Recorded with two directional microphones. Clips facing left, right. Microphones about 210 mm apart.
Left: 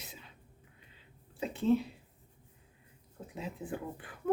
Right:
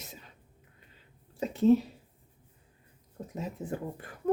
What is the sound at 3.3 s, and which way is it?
Speech, 40° right (ahead or behind).